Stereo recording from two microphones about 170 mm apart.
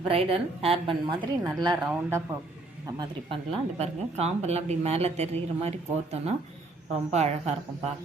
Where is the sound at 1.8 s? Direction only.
15° right (ahead or behind).